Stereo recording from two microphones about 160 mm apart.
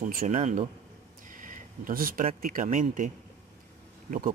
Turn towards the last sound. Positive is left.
turn(degrees=-60)  # may be behind; listen again after turning